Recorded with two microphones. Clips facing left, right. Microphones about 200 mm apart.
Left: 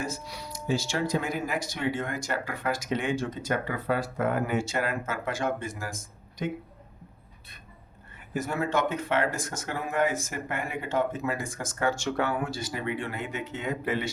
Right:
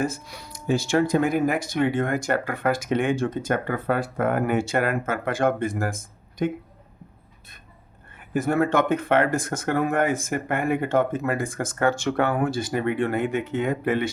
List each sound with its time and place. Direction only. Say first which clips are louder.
0.0 s speech: right 7 dB; 55° right (ahead or behind)
8.3 s speech: right 7 dB; 55° right (ahead or behind)